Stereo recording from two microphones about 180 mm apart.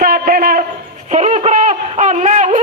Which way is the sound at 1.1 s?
40° right (ahead or behind).